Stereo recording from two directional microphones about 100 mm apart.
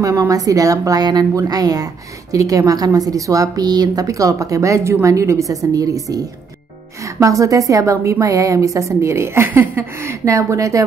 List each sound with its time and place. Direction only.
0.0 s a woman's voice: 30° right (ahead or behind)